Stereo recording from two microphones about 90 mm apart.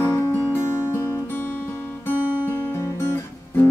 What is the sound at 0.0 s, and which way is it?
Music, 25° left (ahead or behind).